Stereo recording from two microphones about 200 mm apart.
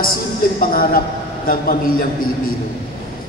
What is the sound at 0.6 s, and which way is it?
A man's voice, 45° left (ahead or behind).